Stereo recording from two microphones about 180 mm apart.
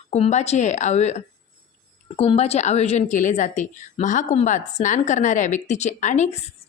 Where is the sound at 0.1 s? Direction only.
40° left (ahead or behind).